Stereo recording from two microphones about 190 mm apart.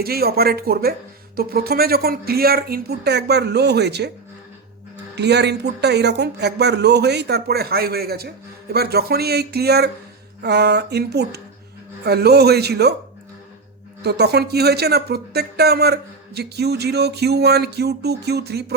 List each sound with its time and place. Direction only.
0.0 s speech: 55° right (ahead or behind)
5.1 s speech: 65° right (ahead or behind)
14.0 s speech: 60° right (ahead or behind)